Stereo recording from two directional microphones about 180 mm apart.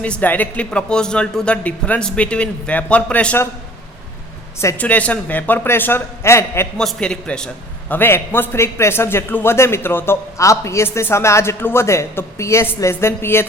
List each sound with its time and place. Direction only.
0.0 s a man's voice: 10° left (ahead or behind)
4.6 s a man's voice: 10° left (ahead or behind)
6.7 s a man's voice: 5° left (ahead or behind)